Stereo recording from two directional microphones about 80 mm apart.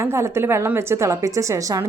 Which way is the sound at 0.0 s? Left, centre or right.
Right.